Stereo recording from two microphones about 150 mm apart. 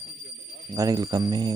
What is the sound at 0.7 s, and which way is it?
Speech, 25° right (ahead or behind).